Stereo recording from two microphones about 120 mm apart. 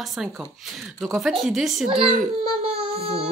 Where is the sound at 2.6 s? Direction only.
55° right (ahead or behind).